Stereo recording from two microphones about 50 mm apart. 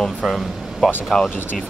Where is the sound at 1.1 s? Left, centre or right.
Centre.